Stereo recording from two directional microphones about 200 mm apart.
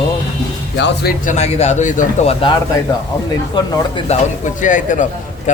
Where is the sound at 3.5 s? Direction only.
20° left (ahead or behind).